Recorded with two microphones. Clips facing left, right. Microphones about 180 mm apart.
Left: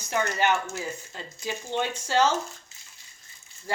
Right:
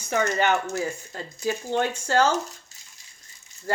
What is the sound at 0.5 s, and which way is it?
Speech, 40° right (ahead or behind).